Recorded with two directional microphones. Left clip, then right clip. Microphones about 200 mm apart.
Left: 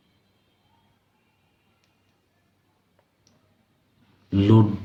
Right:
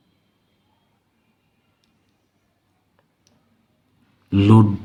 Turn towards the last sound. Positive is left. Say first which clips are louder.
# right 4 dB
turn(degrees=-50)  # may be behind; listen again after turning